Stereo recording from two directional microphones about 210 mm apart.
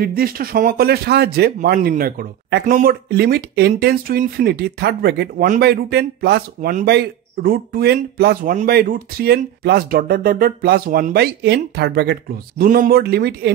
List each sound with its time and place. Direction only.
0.0 s speech: 45° right (ahead or behind)